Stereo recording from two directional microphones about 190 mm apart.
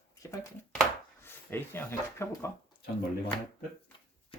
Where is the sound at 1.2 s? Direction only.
10° left (ahead or behind).